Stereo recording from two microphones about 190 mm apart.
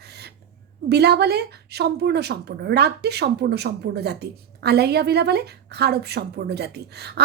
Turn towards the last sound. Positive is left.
turn(degrees=-60)  # may be behind; listen again after turning